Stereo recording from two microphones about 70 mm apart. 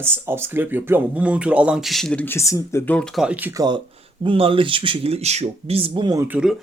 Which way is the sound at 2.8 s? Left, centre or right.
Centre.